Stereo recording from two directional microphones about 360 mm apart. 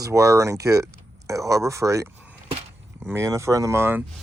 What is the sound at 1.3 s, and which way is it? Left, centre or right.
Speech, centre.